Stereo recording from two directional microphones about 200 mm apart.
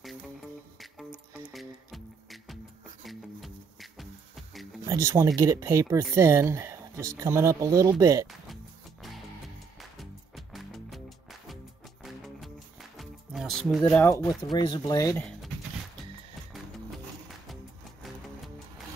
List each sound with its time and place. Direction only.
1.5 s music: centre (ahead or behind)
4.8 s speech: 15° right (ahead or behind)
9.9 s music: centre (ahead or behind)
12.9 s music: centre (ahead or behind)
13.9 s speech: 10° left (ahead or behind)
14.5 s speech: 20° left (ahead or behind)